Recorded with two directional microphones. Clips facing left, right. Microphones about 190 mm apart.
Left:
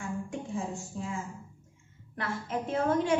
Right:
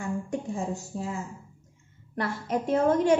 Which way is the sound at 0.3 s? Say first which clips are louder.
Right 4 dB; 40° right (ahead or behind).